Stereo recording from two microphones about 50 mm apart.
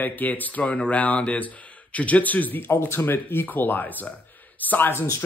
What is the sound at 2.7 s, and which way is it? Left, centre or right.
Speech, left.